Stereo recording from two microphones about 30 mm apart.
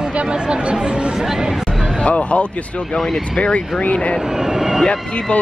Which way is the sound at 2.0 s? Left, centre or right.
Left.